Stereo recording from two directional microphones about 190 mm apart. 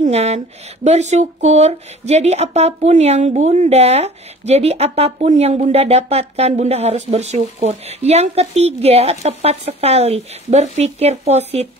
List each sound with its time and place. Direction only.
0.0 s speech: 35° right (ahead or behind)